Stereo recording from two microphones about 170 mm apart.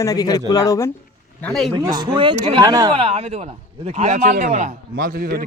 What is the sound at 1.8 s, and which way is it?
Speech, 25° right (ahead or behind).